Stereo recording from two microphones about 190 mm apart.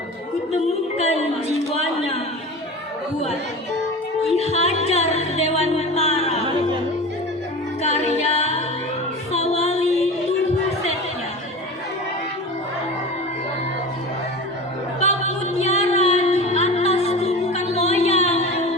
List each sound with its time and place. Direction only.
0.5 s a sound: 35° left (ahead or behind)
1.7 s music: 35° left (ahead or behind)
4.4 s music: 35° left (ahead or behind)
7.8 s a capella: 35° left (ahead or behind)
9.3 s music: 35° left (ahead or behind)
15.5 s music: 35° left (ahead or behind)